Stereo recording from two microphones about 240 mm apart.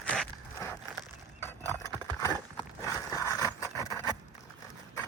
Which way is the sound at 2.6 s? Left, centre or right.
Centre.